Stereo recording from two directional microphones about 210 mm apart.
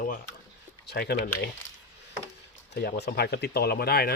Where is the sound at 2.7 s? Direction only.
50° left (ahead or behind).